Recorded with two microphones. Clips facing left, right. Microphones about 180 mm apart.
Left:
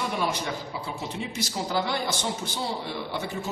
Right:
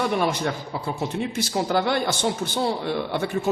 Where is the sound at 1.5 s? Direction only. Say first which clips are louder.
Right 6 dB; 60° right (ahead or behind).